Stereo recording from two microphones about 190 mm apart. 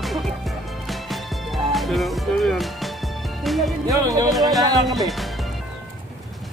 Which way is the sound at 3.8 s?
20° right (ahead or behind).